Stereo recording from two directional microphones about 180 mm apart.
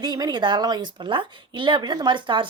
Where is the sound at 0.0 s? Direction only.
25° right (ahead or behind).